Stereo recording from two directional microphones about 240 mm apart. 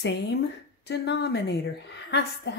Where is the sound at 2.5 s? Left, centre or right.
Left.